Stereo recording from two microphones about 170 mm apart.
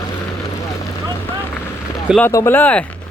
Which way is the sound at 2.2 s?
15° left (ahead or behind).